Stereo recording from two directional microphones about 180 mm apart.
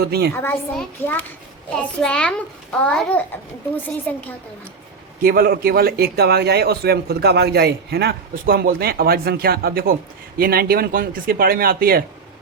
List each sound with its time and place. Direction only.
0.0 s a man's voice: 60° right (ahead or behind)
0.8 s a child's voice: 10° left (ahead or behind)
5.2 s a man's voice: 55° right (ahead or behind)